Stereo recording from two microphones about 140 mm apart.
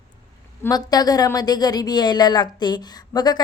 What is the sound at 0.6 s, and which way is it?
Speech, 25° left (ahead or behind).